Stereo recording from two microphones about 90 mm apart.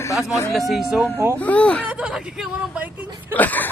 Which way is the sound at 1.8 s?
10° right (ahead or behind).